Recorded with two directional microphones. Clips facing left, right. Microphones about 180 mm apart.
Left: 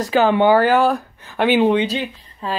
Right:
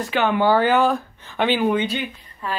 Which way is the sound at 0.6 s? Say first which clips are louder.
Left 2 dB; 5° left (ahead or behind).